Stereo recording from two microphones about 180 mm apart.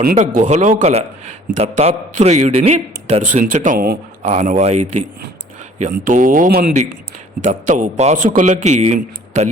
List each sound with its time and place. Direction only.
0.2 s a man's voice: 40° right (ahead or behind)
4.2 s a man's voice: 40° right (ahead or behind)
5.8 s a man's voice: 45° right (ahead or behind)